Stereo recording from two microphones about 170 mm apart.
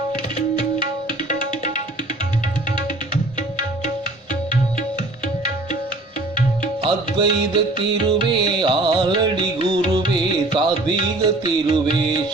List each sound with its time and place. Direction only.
1.3 s music: 45° left (ahead or behind)
6.8 s music: 30° right (ahead or behind)